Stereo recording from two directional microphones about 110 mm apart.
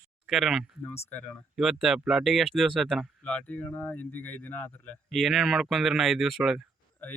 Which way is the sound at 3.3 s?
10° left (ahead or behind).